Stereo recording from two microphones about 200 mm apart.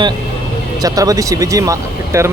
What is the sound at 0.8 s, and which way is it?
Speech, 20° right (ahead or behind).